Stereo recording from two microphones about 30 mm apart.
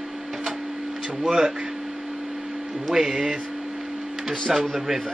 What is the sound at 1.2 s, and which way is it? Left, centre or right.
Speech, right.